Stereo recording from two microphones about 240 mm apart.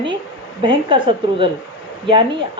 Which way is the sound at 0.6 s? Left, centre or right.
Centre.